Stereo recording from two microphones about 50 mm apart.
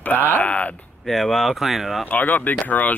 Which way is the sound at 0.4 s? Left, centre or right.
Left.